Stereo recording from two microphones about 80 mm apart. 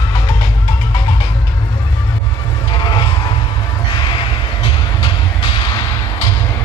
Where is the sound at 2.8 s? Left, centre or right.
Left.